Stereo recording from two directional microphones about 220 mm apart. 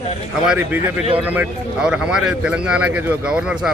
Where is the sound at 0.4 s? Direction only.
5° right (ahead or behind).